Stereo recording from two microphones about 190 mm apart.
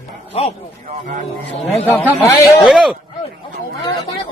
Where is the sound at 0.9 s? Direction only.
40° right (ahead or behind).